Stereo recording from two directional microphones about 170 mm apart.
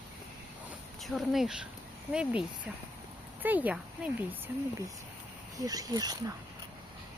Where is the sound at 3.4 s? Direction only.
10° right (ahead or behind).